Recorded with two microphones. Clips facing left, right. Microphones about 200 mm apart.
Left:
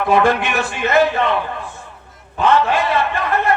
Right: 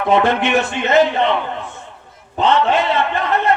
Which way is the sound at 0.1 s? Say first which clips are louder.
Right 2 dB; 20° right (ahead or behind).